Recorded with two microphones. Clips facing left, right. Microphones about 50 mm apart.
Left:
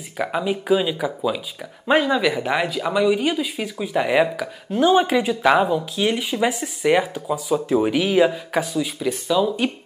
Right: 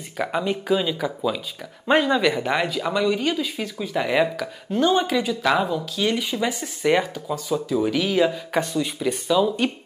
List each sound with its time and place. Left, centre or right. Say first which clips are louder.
0.2 s speech: left 1 dB; centre
7.5 s speech: left 3 dB; left
7.9 s speech: left 2 dB; centre